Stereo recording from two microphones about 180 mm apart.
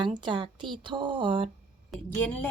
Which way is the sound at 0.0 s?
25° right (ahead or behind).